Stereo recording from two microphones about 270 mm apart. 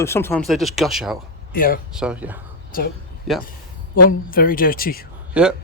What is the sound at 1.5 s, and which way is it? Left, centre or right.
Speech, left.